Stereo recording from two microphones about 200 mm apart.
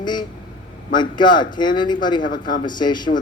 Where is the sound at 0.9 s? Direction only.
20° left (ahead or behind).